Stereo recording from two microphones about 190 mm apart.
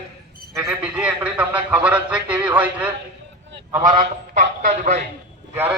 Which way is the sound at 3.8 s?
40° right (ahead or behind).